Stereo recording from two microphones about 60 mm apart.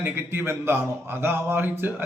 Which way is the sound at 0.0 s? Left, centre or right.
Right.